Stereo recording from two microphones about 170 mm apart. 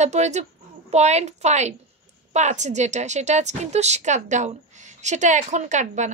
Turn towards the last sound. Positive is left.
turn(degrees=-45)  # may be behind; listen again after turning